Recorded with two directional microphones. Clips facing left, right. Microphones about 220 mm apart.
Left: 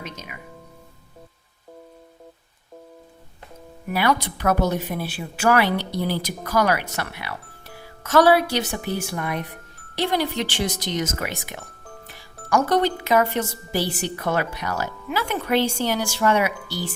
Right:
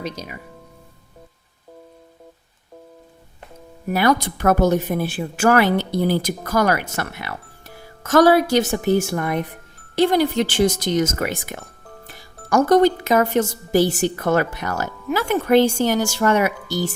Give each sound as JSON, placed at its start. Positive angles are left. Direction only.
{"t": 0.0, "sound": "speech", "side_deg": -35}
{"t": 3.8, "sound": "a woman's voice", "side_deg": -45}